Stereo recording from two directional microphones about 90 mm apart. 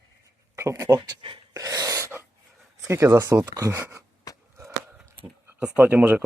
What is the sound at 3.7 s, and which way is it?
Speech, 30° right (ahead or behind).